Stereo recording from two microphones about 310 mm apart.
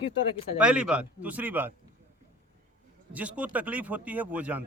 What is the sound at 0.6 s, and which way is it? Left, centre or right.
A man's voice, centre.